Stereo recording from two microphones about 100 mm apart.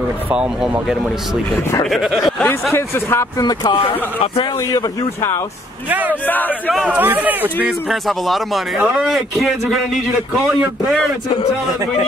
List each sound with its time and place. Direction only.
0.3 s a man's voice: 10° right (ahead or behind)
2.7 s speech: 25° left (ahead or behind)
3.3 s speech: 45° left (ahead or behind)
4.7 s speech: 30° left (ahead or behind)
5.9 s speech: 15° right (ahead or behind)
6.2 s speech: 20° left (ahead or behind)
6.9 s speech: 15° right (ahead or behind)
7.6 s a man's voice: centre (ahead or behind)